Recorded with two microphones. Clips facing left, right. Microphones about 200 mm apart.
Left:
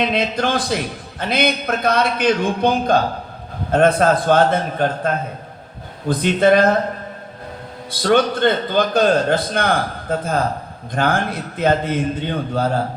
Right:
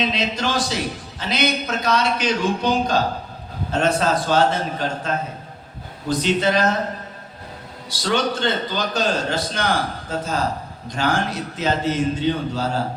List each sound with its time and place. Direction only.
0.0 s a man's voice: 55° left (ahead or behind)
7.9 s a man's voice: 55° left (ahead or behind)